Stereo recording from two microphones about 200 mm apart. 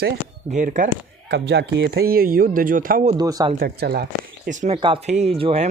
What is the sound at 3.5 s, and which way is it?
Speech, 50° right (ahead or behind).